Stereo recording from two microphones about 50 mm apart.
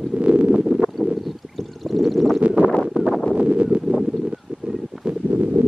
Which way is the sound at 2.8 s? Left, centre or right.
Centre.